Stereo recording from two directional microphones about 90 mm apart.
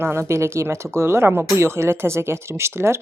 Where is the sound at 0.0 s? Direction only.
30° right (ahead or behind).